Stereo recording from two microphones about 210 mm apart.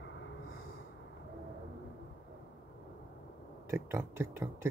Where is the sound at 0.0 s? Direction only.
60° left (ahead or behind).